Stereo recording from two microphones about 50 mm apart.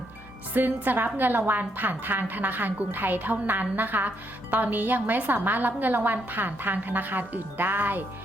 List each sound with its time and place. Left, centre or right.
0.5 s a woman's voice: right